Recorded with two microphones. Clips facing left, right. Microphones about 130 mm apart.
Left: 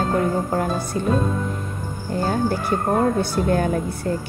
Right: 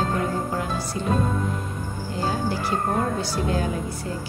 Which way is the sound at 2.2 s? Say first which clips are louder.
Left 4 dB; 50° left (ahead or behind).